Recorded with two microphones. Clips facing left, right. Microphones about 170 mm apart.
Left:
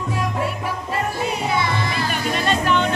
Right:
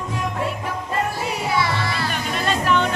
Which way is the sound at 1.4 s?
20° left (ahead or behind).